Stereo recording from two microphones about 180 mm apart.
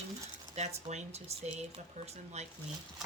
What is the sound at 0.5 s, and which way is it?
Speech, 40° right (ahead or behind).